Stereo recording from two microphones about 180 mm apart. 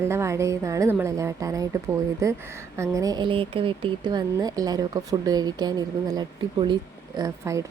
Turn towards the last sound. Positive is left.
turn(degrees=-15)  # may be behind; listen again after turning